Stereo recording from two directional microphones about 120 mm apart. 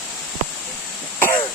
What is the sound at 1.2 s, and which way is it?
Throat clearing, 15° left (ahead or behind).